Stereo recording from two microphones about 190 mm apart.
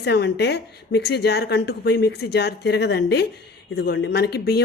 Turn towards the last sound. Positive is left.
turn(degrees=55)  # may be behind; listen again after turning